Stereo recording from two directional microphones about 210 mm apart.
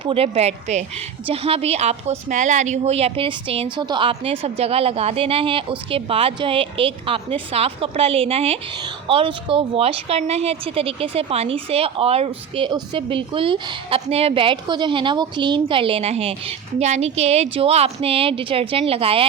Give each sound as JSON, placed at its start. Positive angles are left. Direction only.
{"t": 0.0, "sound": "speech", "side_deg": -25}